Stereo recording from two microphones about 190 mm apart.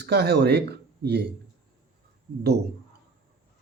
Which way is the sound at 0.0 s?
60° right (ahead or behind).